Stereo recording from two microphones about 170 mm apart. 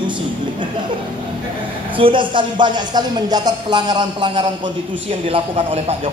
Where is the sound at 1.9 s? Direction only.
30° right (ahead or behind).